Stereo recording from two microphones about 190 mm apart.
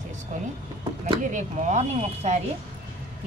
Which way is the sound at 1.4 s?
35° right (ahead or behind).